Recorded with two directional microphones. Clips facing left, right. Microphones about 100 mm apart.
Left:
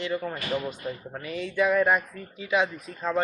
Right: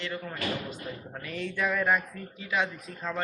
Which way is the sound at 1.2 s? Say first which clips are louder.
Left 6 dB; 10° left (ahead or behind).